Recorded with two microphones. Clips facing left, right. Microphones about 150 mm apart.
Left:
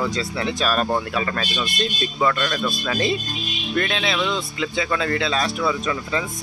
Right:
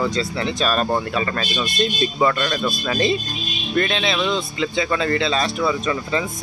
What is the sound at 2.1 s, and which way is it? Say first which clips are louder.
Speech: even; 15° right (ahead or behind).